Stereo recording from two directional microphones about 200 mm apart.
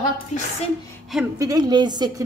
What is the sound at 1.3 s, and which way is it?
Speech, 20° right (ahead or behind).